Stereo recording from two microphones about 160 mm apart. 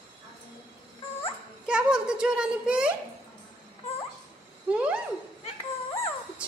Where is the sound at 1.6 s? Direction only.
5° right (ahead or behind).